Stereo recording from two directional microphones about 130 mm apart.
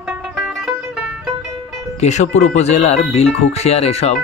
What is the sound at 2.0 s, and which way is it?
Speech, 60° left (ahead or behind).